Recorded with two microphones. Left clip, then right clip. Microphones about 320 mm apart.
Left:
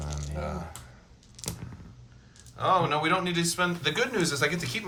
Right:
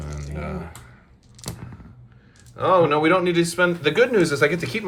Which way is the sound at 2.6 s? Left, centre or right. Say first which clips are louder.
Right 7 dB; centre.